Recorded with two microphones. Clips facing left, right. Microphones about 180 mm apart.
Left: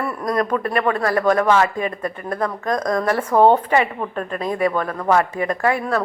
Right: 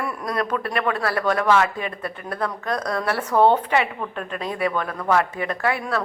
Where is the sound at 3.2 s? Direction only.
30° left (ahead or behind).